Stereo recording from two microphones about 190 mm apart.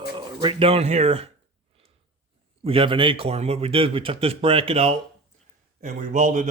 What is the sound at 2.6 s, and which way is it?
A man's voice, 30° right (ahead or behind).